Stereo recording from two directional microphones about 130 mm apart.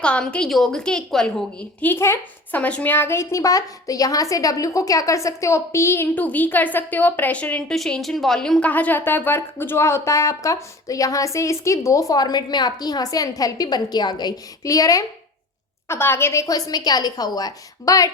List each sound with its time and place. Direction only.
0.0 s a woman's voice: 10° left (ahead or behind); by 18.1 s 25° left (ahead or behind)